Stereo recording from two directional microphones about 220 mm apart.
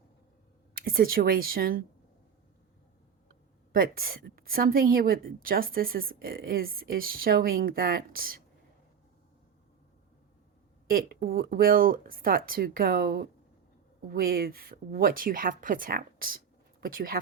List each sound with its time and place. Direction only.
0.7 s a woman's voice: 40° right (ahead or behind)
3.7 s a woman's voice: 40° right (ahead or behind)
10.8 s a woman's voice: 40° right (ahead or behind)